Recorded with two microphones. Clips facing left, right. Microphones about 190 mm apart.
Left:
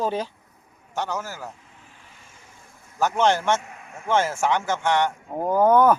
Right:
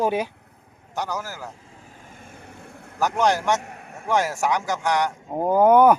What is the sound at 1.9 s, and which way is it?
Vehicle, 45° right (ahead or behind).